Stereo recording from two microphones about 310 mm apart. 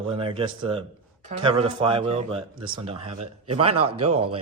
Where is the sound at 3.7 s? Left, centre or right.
Right.